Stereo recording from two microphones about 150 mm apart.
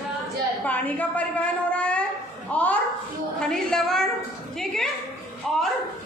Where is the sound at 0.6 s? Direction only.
10° left (ahead or behind).